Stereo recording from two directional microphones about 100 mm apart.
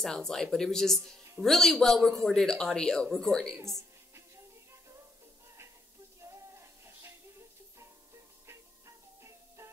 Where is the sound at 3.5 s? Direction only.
30° right (ahead or behind).